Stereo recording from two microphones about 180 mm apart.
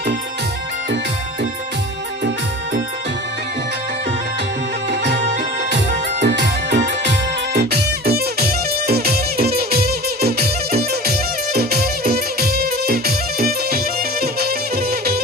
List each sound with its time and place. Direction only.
4.9 s music: 70° right (ahead or behind)